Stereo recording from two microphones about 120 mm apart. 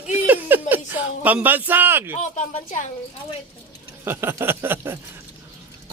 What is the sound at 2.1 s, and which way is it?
Speech, 90° left.